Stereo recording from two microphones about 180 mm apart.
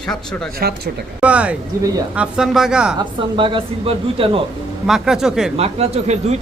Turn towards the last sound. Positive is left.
turn(degrees=-40)  # may be behind; listen again after turning